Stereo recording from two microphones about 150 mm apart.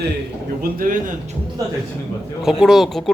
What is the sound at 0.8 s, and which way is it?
Speech, 65° right (ahead or behind).